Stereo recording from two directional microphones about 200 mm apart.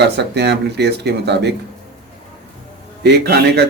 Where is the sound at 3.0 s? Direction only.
55° right (ahead or behind).